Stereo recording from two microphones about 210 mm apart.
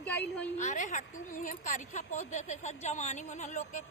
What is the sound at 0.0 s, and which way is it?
Speech, 5° left (ahead or behind).